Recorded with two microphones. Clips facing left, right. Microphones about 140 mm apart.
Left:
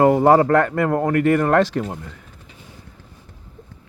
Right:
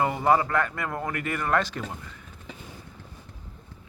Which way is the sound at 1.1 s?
80° left.